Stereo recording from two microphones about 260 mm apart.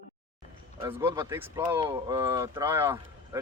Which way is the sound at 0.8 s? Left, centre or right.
Centre.